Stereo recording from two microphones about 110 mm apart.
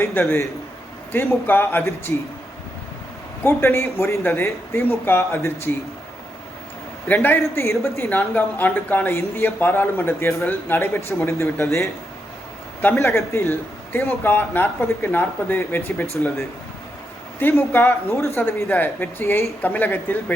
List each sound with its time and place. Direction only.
0.2 s speech: 20° left (ahead or behind)
3.4 s speech: 20° left (ahead or behind)
7.1 s speech: 15° left (ahead or behind)
12.8 s speech: 25° left (ahead or behind)
17.4 s speech: 20° left (ahead or behind)